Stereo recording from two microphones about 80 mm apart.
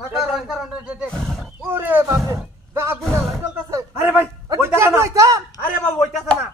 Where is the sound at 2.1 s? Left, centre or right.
Right.